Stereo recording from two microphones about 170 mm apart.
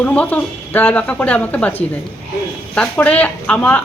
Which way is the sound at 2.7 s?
5° left (ahead or behind).